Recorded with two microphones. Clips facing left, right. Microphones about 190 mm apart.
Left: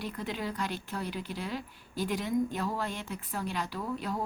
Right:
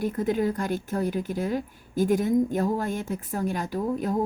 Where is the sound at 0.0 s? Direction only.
45° right (ahead or behind).